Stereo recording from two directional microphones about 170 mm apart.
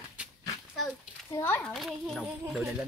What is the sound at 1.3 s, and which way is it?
Speech, 15° left (ahead or behind).